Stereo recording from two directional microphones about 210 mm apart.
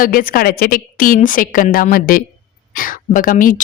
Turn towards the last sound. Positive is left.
turn(degrees=40)  # may be behind; listen again after turning